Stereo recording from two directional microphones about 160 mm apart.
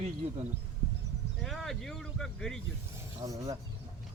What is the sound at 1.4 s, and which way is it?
Speech, centre (ahead or behind).